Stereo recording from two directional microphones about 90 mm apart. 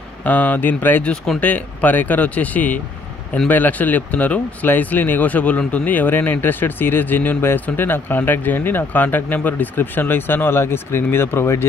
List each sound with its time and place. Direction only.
0.2 s speech: 20° left (ahead or behind)